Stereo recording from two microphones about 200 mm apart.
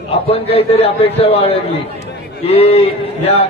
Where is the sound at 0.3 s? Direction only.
30° left (ahead or behind).